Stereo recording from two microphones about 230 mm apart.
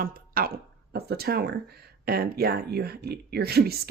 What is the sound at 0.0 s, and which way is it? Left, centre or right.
Speech, right.